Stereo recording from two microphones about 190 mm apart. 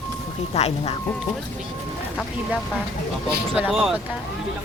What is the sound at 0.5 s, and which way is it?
Speech, 35° left (ahead or behind).